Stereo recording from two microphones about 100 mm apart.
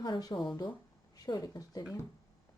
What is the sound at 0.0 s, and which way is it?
Speech, 45° left (ahead or behind).